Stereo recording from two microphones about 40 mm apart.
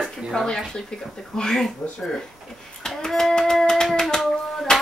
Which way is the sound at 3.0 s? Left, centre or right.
Centre.